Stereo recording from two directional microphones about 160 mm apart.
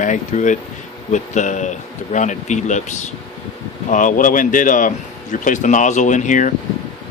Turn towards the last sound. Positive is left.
turn(degrees=50)  # may be behind; listen again after turning